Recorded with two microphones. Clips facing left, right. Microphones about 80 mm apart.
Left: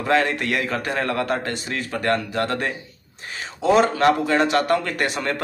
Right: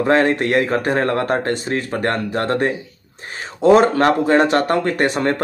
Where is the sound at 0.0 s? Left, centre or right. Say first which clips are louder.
Right 5 dB; right.